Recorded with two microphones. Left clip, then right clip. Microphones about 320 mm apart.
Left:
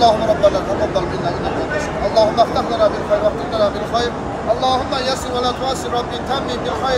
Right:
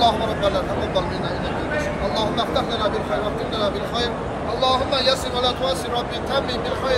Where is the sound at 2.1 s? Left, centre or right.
Centre.